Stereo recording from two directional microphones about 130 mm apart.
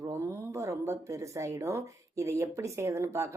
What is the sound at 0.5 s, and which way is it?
Speech, 20° right (ahead or behind).